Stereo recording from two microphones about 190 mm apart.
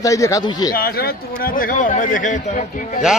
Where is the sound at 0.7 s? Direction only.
55° left (ahead or behind).